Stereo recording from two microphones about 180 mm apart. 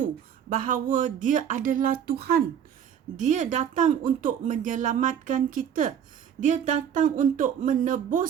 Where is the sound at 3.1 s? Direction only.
45° right (ahead or behind).